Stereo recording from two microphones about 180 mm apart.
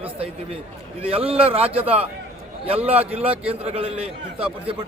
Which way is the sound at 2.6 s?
35° right (ahead or behind).